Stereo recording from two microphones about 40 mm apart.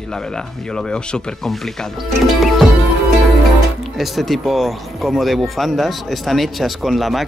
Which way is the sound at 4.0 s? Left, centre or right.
Centre.